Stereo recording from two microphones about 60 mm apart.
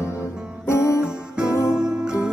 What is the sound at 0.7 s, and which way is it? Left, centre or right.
Music, left.